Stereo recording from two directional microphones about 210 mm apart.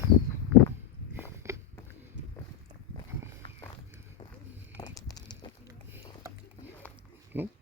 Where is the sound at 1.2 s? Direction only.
15° right (ahead or behind).